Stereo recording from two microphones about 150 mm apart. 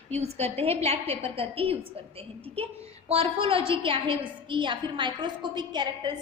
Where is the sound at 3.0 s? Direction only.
40° right (ahead or behind).